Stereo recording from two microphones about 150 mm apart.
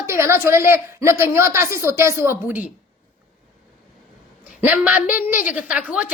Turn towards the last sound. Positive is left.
turn(degrees=-5)  # may be behind; listen again after turning